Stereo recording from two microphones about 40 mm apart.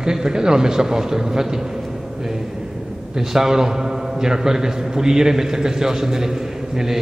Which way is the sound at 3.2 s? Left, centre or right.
Centre.